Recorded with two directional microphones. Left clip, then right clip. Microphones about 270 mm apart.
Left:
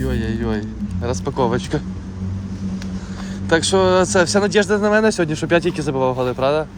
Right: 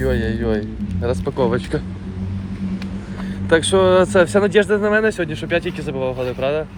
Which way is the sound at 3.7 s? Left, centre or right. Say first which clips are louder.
Right 2 dB; centre.